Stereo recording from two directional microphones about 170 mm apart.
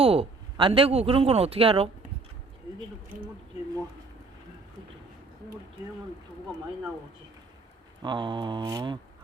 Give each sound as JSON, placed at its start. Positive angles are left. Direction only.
{"t": 0.0, "sound": "a man's voice", "side_deg": -35}
{"t": 8.0, "sound": "speech", "side_deg": -25}